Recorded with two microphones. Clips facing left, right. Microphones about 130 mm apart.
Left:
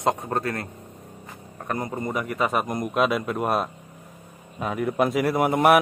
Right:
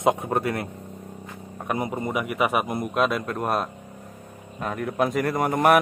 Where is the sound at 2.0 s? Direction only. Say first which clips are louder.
Left 1 dB; 5° right (ahead or behind).